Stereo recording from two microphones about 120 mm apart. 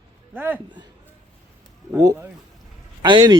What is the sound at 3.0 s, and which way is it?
Speech, 40° right (ahead or behind).